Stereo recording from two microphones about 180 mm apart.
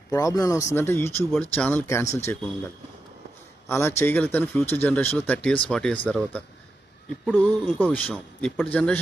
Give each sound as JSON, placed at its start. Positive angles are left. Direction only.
{"t": 0.1, "sound": "speech", "side_deg": 20}
{"t": 3.7, "sound": "speech", "side_deg": 15}